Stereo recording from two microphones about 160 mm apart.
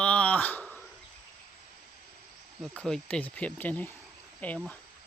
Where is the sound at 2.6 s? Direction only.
5° left (ahead or behind).